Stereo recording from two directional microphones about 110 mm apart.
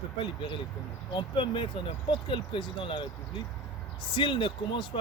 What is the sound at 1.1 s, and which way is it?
Speech, 50° left (ahead or behind).